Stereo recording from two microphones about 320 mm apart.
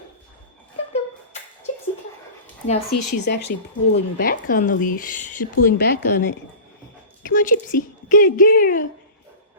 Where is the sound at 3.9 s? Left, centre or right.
Left.